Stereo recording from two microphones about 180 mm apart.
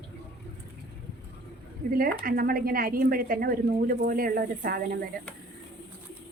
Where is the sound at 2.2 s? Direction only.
55° right (ahead or behind).